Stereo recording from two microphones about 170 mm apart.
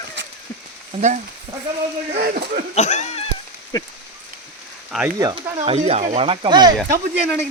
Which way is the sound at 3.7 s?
20° left (ahead or behind).